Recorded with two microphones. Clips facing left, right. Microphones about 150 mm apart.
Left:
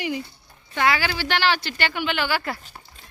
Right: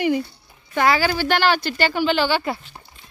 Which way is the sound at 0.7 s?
40° right (ahead or behind).